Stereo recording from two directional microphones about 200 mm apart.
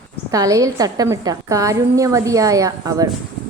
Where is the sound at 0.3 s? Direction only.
15° right (ahead or behind).